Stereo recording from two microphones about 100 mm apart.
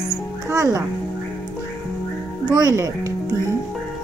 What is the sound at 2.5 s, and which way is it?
Speech, 40° right (ahead or behind).